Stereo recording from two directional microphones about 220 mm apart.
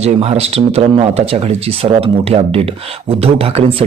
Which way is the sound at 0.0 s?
30° right (ahead or behind).